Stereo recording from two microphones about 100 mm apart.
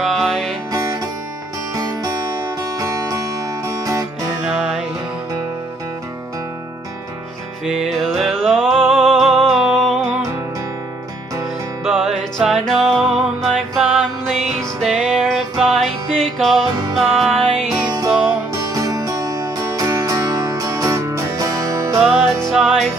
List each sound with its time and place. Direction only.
0.0 s music: centre (ahead or behind)
0.7 s music: 35° right (ahead or behind)
4.5 s music: 5° right (ahead or behind)
7.6 s music: 5° right (ahead or behind)
11.8 s music: centre (ahead or behind)
18.7 s music: 35° right (ahead or behind)
22.1 s music: 5° left (ahead or behind)